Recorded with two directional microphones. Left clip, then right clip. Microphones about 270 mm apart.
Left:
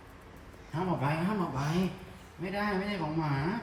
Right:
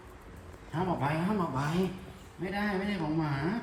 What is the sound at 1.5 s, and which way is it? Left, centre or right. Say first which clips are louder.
Speech: right 1 dB; centre.